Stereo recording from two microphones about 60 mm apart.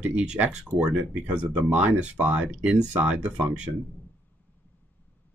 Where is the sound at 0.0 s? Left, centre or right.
Centre.